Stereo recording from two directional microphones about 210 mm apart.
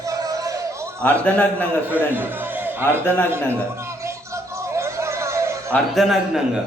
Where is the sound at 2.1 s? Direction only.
10° right (ahead or behind).